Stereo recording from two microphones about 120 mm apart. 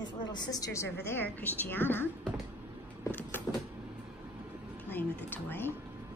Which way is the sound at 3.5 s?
10° right (ahead or behind).